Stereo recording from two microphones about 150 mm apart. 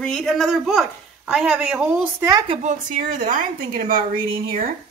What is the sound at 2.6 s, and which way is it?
A woman's voice, 65° right (ahead or behind).